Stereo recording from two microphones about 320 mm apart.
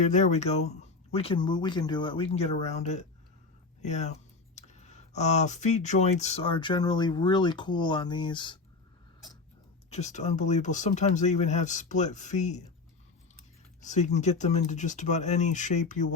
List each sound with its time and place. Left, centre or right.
0.0 s speech: left
9.9 s speech: left
13.8 s speech: left